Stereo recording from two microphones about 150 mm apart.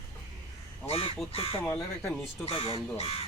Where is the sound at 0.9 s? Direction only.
40° left (ahead or behind).